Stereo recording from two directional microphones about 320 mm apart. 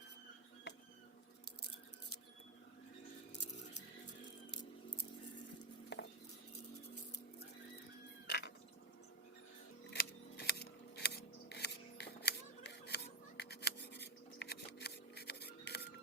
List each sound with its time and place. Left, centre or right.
0.7 s a sound: left
5.9 s patter: left
8.3 s squish: left
9.9 s camera: left
10.6 s scissors: left